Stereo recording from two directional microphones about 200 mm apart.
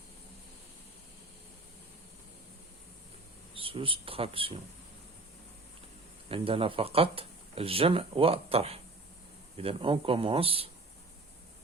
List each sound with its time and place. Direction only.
3.5 s speech: 25° right (ahead or behind)
6.2 s speech: 30° right (ahead or behind)